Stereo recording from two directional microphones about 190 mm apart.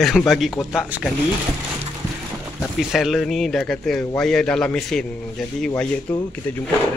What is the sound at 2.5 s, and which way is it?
Speech, centre (ahead or behind).